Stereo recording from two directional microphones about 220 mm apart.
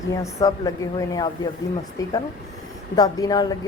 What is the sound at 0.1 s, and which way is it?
A woman's voice, 15° left (ahead or behind).